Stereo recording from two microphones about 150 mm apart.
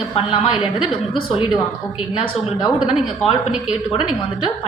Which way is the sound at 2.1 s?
30° left (ahead or behind).